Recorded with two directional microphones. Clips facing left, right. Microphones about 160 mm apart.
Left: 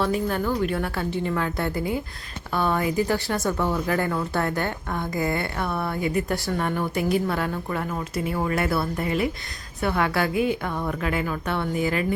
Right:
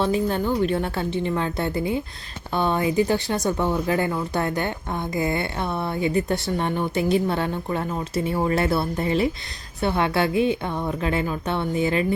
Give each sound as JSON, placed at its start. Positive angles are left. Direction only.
{"t": 0.0, "sound": "speech", "side_deg": -25}